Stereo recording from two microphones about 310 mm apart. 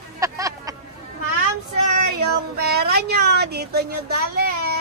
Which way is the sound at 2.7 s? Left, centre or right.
Right.